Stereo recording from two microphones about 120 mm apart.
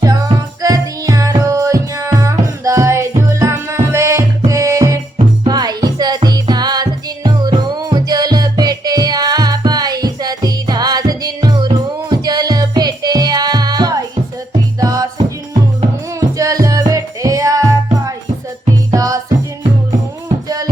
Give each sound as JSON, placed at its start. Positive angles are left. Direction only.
{"t": 0.0, "sound": "music", "side_deg": -30}
{"t": 16.4, "sound": "music", "side_deg": -30}